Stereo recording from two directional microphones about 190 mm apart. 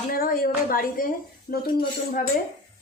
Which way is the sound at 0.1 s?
50° left (ahead or behind).